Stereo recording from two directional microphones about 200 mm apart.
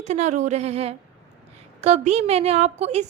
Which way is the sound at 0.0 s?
35° right (ahead or behind).